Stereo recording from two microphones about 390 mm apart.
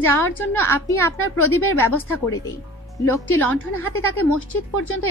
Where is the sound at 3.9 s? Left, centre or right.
Left.